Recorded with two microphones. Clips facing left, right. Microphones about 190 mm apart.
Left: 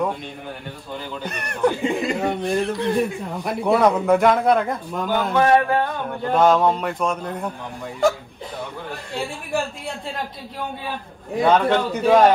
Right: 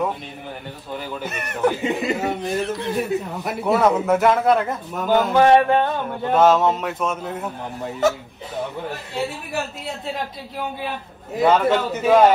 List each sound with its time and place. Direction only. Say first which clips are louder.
1.2 s a man's voice: left 1 dB; 5° right (ahead or behind)
5.3 s a sound: right 2 dB; 25° right (ahead or behind)
6.3 s a man's voice: right 1 dB; 5° right (ahead or behind)
9.5 s a man's voice: left 2 dB; 5° right (ahead or behind)
11.4 s a man's voice: right 1 dB; 5° right (ahead or behind)